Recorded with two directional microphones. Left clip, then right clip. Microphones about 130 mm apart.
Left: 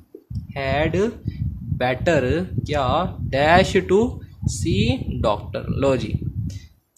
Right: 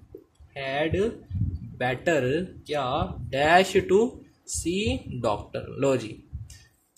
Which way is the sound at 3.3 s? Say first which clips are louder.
Left 4 dB; 30° left (ahead or behind).